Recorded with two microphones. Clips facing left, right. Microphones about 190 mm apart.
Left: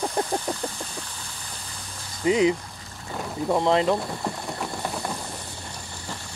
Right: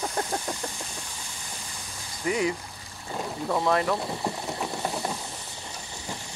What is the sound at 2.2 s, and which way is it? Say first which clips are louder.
Speech: left 6 dB; 20° left (ahead or behind).